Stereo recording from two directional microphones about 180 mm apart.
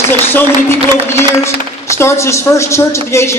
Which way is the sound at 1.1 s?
15° left (ahead or behind).